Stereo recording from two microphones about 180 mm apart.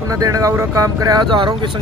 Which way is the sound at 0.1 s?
20° right (ahead or behind).